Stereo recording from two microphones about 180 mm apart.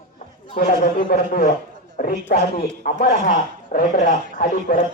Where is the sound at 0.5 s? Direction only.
50° left (ahead or behind).